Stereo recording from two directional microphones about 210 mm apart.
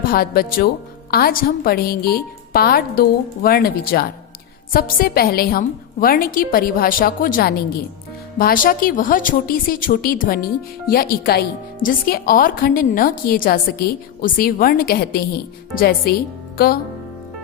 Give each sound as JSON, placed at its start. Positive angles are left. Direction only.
{"t": 0.1, "sound": "a woman's voice", "side_deg": 45}